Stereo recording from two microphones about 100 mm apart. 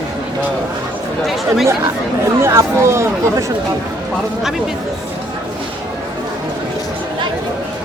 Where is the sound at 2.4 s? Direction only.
30° right (ahead or behind).